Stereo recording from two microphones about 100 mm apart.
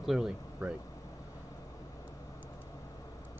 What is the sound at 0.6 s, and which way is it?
Speech, 15° right (ahead or behind).